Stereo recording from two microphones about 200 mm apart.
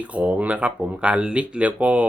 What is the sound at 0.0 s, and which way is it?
Speech, 5° right (ahead or behind).